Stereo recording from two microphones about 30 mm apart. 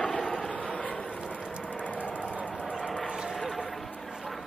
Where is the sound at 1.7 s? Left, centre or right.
Left.